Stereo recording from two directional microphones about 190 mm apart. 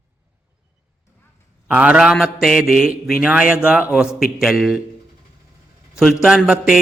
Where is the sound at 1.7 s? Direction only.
5° right (ahead or behind).